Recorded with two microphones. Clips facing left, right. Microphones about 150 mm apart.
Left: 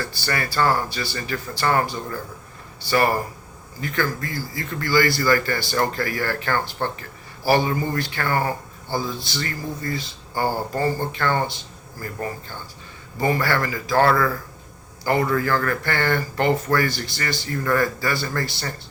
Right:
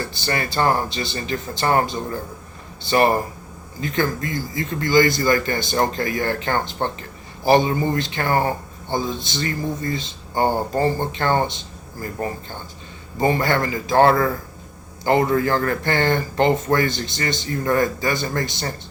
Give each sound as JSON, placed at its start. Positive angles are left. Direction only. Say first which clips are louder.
{"t": 0.0, "sound": "a man's voice", "louder": "right 2 dB", "side_deg": -20}